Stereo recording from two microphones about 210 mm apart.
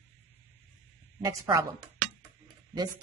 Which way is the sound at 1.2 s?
15° right (ahead or behind).